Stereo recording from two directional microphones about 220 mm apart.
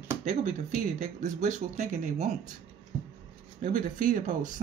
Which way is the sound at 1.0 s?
35° right (ahead or behind).